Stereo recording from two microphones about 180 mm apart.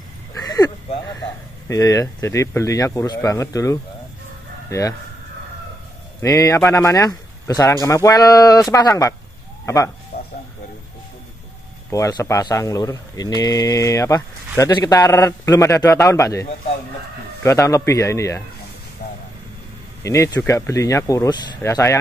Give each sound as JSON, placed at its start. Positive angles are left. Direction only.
{"t": 0.3, "sound": "a sound", "side_deg": 20}
{"t": 1.7, "sound": "speech", "side_deg": 20}
{"t": 6.2, "sound": "speech", "side_deg": 20}
{"t": 10.1, "sound": "a sound", "side_deg": 60}
{"t": 11.9, "sound": "speech", "side_deg": 20}
{"t": 20.0, "sound": "speech", "side_deg": 15}